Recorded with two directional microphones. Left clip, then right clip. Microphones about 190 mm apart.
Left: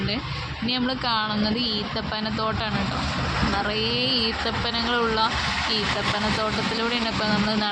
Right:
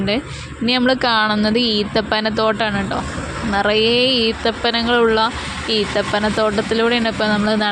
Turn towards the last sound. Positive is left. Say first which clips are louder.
# right 7 dB
turn(degrees=-35)  # may be behind; listen again after turning